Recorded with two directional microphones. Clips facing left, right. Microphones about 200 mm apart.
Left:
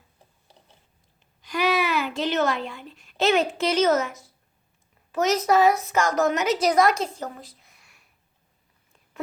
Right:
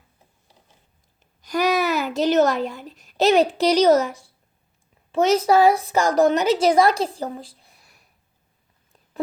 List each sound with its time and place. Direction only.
1.4 s a woman's voice: 40° right (ahead or behind)